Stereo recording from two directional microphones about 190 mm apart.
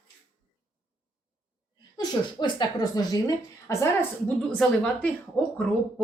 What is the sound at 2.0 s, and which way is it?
Speech, 20° left (ahead or behind).